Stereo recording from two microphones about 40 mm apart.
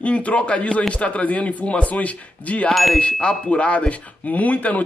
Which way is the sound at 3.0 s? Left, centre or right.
Left.